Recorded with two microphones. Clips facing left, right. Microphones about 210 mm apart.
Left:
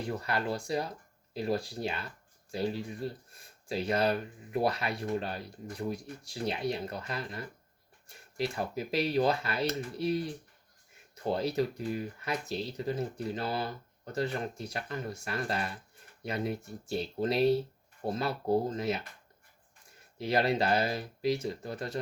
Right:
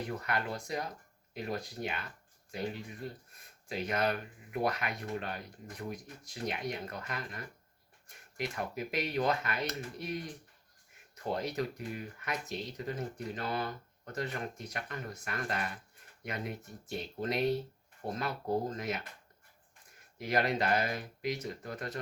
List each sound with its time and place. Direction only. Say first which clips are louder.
0.0 s speech: left 3 dB; 30° left (ahead or behind)
20.1 s speech: left 3 dB; 30° left (ahead or behind)